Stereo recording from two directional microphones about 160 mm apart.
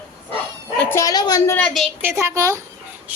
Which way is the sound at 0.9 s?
20° left (ahead or behind).